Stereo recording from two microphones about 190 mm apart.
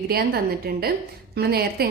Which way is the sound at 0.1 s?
55° right (ahead or behind).